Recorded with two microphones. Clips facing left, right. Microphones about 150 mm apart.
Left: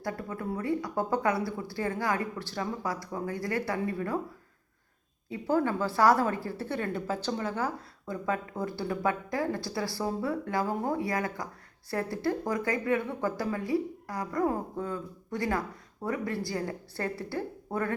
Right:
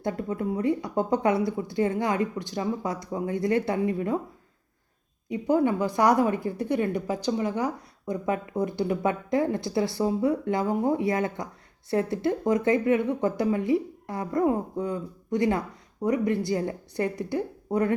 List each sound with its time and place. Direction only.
0.0 s a woman's voice: 20° right (ahead or behind)
5.3 s a woman's voice: 20° right (ahead or behind)